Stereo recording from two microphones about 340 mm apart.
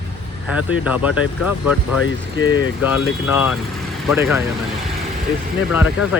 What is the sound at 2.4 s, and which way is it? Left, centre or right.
Speech, centre.